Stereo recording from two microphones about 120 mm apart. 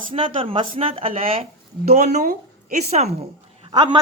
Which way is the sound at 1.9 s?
75° right (ahead or behind).